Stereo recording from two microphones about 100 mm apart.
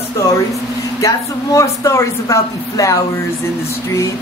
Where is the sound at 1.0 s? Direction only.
30° left (ahead or behind).